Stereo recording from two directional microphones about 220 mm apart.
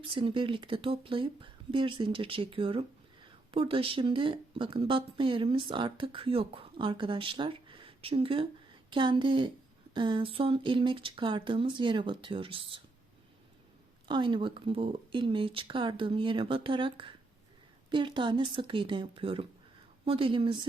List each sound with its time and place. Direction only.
0.1 s speech: 20° right (ahead or behind)
14.1 s speech: 20° right (ahead or behind)